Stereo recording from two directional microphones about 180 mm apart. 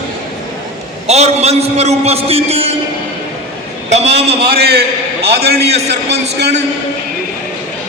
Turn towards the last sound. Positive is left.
turn(degrees=-70)  # may be behind; listen again after turning